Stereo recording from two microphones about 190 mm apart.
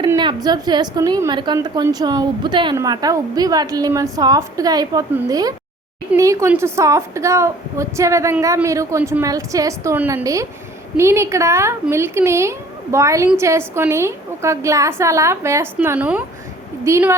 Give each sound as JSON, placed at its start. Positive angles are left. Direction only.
{"t": 0.2, "sound": "a woman's voice", "side_deg": -20}